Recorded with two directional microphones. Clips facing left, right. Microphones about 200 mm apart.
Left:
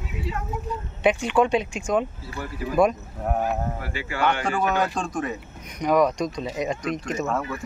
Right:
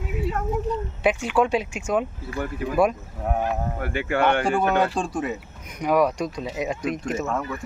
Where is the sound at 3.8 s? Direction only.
55° right (ahead or behind).